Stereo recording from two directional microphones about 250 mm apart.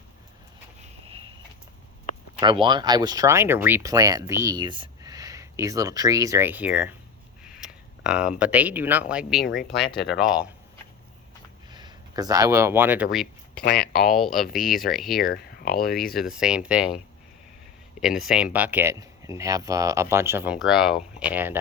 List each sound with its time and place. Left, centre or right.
0.8 s a sound: right
2.4 s speech: centre
7.4 s a sound: centre
8.4 s speech: centre
11.7 s speech: centre
15.2 s speech: left
16.0 s speech: centre
18.0 s speech: centre